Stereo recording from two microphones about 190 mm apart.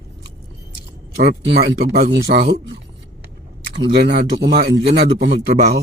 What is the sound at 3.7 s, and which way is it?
Speech, 65° right (ahead or behind).